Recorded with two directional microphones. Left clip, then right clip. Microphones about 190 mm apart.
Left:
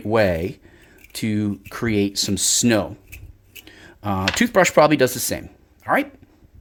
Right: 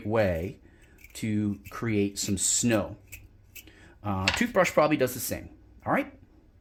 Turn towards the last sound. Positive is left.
turn(degrees=45)  # may be behind; listen again after turning